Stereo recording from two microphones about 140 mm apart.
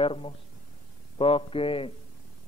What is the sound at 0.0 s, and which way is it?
A man's voice, 40° left (ahead or behind).